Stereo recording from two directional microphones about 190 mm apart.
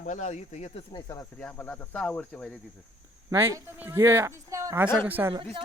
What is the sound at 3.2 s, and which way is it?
Speech, 15° right (ahead or behind).